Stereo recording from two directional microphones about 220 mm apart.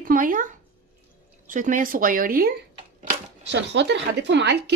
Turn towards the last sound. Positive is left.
turn(degrees=-50)  # may be behind; listen again after turning